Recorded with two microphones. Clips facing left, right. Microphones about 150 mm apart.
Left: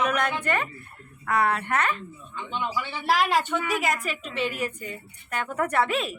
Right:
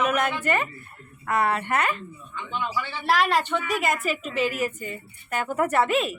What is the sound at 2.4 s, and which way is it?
Speech, 20° left (ahead or behind).